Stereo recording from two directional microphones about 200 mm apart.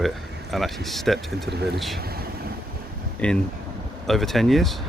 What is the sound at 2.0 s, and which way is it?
Vehicle, 50° right (ahead or behind).